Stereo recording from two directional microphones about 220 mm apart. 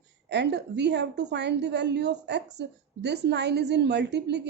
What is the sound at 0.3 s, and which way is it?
A woman's voice, 50° right (ahead or behind).